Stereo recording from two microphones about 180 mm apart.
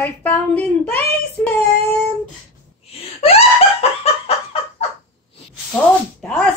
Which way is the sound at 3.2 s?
35° left (ahead or behind).